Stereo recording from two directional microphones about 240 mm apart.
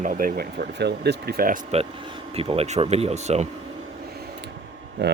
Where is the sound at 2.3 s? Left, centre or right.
Right.